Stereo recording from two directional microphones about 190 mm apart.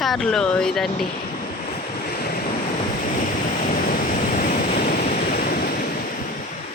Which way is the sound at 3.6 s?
45° left (ahead or behind).